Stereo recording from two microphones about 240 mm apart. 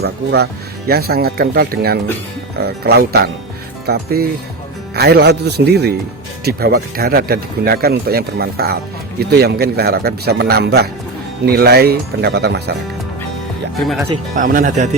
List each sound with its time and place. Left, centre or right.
0.0 s a man's voice: right
14.3 s speech: right